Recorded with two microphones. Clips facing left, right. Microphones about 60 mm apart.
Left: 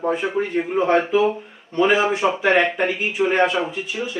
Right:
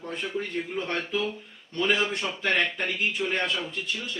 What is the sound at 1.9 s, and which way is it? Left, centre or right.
Speech, centre.